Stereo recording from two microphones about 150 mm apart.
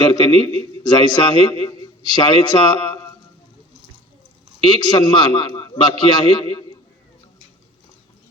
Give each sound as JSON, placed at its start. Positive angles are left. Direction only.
{"t": 0.0, "sound": "a man's voice", "side_deg": 30}
{"t": 4.6, "sound": "a man's voice", "side_deg": 30}